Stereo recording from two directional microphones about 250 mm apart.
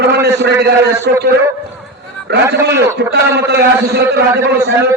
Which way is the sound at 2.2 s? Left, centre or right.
Right.